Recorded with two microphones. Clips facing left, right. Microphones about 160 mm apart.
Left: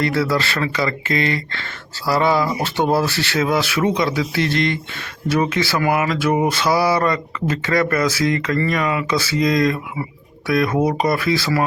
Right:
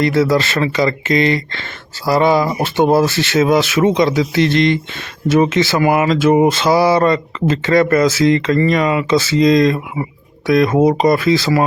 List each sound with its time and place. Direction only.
0.0 s speech: 20° right (ahead or behind)